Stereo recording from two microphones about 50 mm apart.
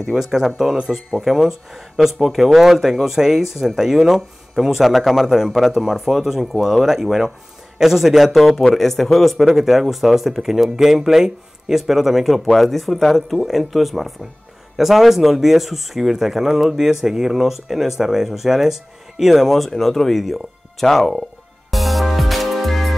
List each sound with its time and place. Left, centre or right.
0.0 s speech: centre
21.6 s music: centre